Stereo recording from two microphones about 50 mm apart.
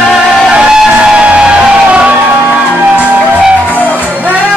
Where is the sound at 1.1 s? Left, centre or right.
Right.